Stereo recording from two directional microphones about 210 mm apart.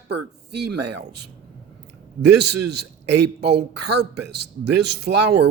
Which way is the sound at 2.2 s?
55° right (ahead or behind).